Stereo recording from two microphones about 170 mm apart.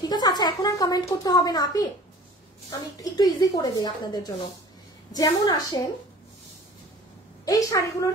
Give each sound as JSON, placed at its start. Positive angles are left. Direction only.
{"t": 0.1, "sound": "a child's voice", "side_deg": 25}
{"t": 3.0, "sound": "a child's voice", "side_deg": 25}
{"t": 7.4, "sound": "a child's voice", "side_deg": 20}